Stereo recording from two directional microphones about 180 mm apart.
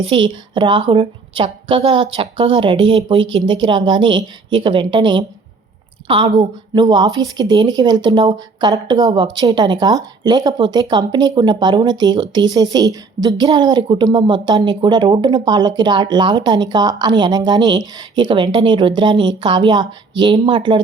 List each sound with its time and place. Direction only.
0.1 s a woman's voice: 25° right (ahead or behind)